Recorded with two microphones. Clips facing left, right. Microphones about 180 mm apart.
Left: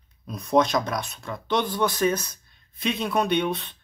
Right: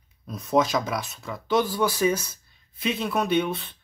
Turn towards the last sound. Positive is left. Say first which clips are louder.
# even
turn(degrees=0)  # may be behind; listen again after turning